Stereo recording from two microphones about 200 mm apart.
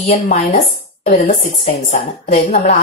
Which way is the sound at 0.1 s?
45° left (ahead or behind).